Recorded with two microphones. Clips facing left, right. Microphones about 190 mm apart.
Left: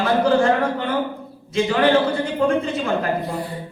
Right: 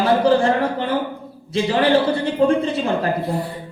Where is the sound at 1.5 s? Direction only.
35° right (ahead or behind).